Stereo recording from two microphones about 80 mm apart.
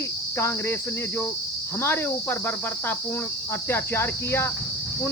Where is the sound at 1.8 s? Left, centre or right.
Left.